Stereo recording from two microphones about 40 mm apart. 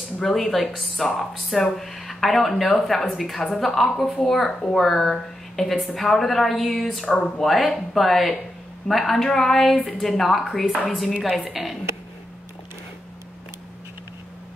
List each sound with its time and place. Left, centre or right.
0.2 s speech: centre
4.5 s a child's voice: centre
4.7 s speech: centre
7.2 s a child's voice: centre
7.4 s a woman's voice: centre